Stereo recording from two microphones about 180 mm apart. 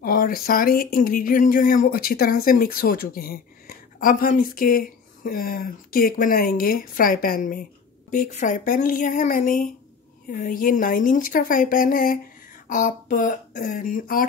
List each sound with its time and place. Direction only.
0.0 s speech: 50° left (ahead or behind)